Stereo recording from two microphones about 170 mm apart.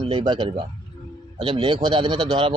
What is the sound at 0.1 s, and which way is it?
A man's voice, 30° right (ahead or behind).